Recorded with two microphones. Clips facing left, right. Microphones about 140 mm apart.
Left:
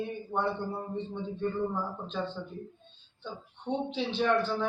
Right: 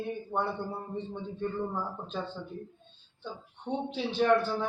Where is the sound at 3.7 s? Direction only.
5° right (ahead or behind).